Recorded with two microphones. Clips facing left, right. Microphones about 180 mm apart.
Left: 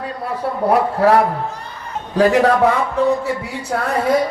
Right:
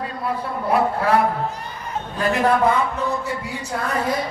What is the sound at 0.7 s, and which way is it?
A man's voice, 75° left (ahead or behind).